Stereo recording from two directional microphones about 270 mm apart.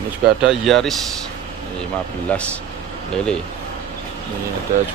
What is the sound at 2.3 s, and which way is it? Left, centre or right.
Speech, centre.